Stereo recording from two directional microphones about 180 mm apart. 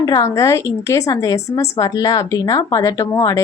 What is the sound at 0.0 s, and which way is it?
Speech, 20° left (ahead or behind).